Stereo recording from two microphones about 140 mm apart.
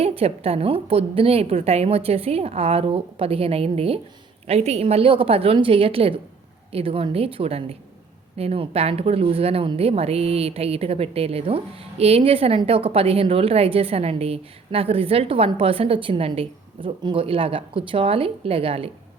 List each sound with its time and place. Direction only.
0.0 s speech: 45° right (ahead or behind)